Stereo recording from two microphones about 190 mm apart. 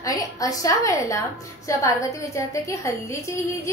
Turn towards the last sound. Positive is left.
turn(degrees=15)  # may be behind; listen again after turning